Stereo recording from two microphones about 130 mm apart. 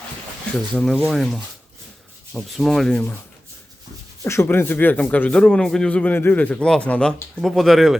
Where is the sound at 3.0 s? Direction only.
15° left (ahead or behind).